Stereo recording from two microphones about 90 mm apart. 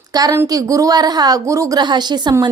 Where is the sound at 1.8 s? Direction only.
55° right (ahead or behind).